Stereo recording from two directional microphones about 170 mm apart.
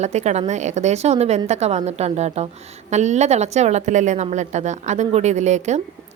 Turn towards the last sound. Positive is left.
turn(degrees=-45)  # may be behind; listen again after turning